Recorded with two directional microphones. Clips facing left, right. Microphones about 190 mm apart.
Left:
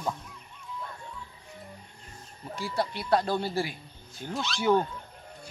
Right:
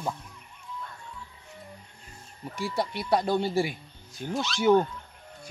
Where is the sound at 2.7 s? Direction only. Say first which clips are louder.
Even; 15° right (ahead or behind).